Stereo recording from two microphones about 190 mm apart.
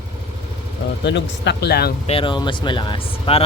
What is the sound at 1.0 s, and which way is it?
Speech, 65° left (ahead or behind).